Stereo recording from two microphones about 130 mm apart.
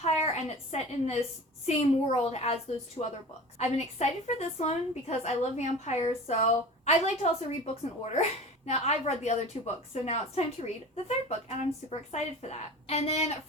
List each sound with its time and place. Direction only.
0.0 s a woman's voice: 55° left (ahead or behind)
3.6 s a woman's voice: 55° left (ahead or behind)